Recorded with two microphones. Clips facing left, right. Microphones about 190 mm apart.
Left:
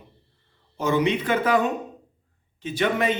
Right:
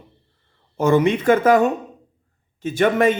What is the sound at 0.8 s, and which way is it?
Speech, 50° right (ahead or behind).